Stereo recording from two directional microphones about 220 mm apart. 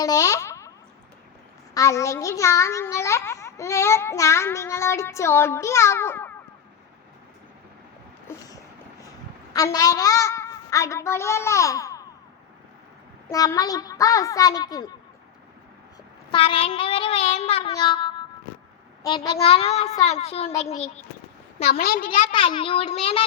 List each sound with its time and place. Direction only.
0.0 s speech: 15° left (ahead or behind)
1.7 s a child's voice: 15° left (ahead or behind)
8.3 s a sound: 15° left (ahead or behind)
9.5 s a woman's voice: 15° left (ahead or behind)
13.2 s a child's voice: 15° left (ahead or behind)
16.3 s child singing: 25° left (ahead or behind)
21.7 s a woman's voice: 45° left (ahead or behind)
22.3 s child singing: 20° left (ahead or behind)